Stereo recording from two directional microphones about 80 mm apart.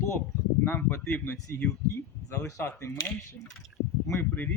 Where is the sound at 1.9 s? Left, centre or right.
Left.